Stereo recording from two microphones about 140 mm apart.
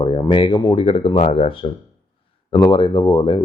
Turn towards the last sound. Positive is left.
turn(degrees=30)  # may be behind; listen again after turning